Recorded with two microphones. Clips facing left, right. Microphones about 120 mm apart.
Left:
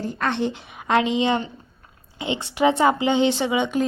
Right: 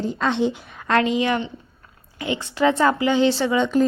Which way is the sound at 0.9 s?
20° left (ahead or behind).